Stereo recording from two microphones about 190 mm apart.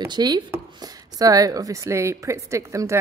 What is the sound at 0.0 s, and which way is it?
A woman's voice, 20° right (ahead or behind).